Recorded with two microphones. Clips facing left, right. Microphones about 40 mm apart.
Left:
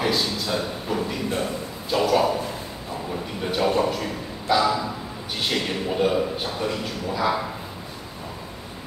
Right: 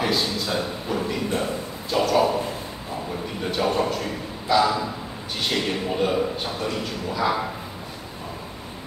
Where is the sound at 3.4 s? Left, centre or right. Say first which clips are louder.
Left 1 dB; centre.